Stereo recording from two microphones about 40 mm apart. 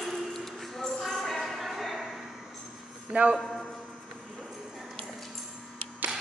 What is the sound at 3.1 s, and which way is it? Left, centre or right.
Speech, right.